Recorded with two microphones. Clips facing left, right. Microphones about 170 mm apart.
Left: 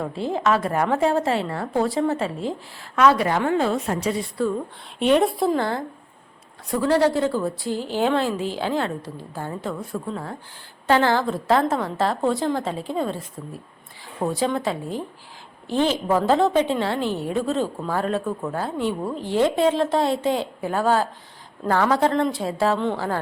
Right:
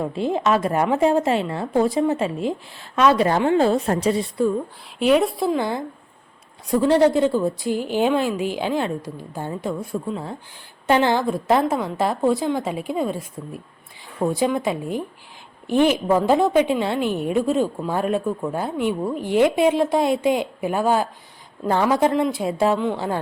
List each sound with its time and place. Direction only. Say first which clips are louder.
0.0 s a woman's voice: right 2 dB; 15° right (ahead or behind); by 4.1 s 35° right (ahead or behind)
4.9 s a woman's voice: right 1 dB; 5° right (ahead or behind)
5.5 s a woman's voice: even; 15° right (ahead or behind)